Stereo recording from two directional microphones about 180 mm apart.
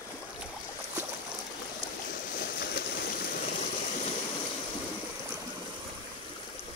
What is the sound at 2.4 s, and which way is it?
Stream, 60° left (ahead or behind).